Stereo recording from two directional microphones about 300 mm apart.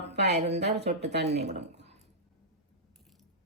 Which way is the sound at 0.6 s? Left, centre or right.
Right.